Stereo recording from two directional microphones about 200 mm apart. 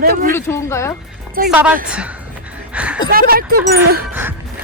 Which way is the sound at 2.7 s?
5° right (ahead or behind).